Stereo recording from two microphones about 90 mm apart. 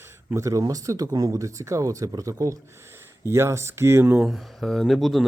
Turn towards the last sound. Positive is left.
turn(degrees=0)  # may be behind; listen again after turning